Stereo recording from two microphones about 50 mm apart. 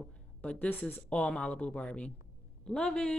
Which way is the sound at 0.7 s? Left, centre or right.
Left.